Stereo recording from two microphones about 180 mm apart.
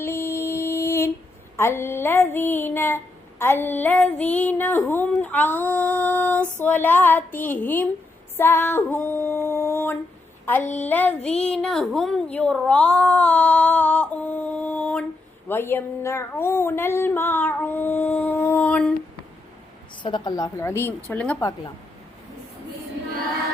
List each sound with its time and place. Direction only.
0.0 s a sound: 15° left (ahead or behind)
1.5 s speech: 15° left (ahead or behind)
8.4 s female singing: 10° left (ahead or behind)
10.4 s a sound: 10° left (ahead or behind)
10.8 s speech: 10° left (ahead or behind)
20.0 s a woman's voice: 25° left (ahead or behind); by 21.3 s 10° left (ahead or behind)